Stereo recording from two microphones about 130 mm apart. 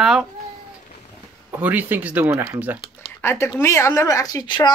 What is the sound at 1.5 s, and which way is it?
Speech, 15° right (ahead or behind).